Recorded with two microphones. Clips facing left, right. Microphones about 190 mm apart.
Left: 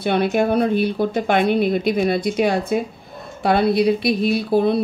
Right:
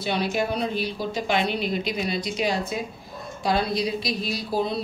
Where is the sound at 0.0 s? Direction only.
55° left (ahead or behind).